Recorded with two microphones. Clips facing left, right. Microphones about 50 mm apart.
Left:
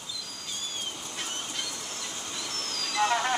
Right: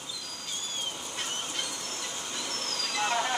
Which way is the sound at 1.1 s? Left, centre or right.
Centre.